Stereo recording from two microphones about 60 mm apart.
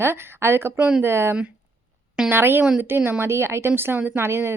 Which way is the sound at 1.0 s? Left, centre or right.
Right.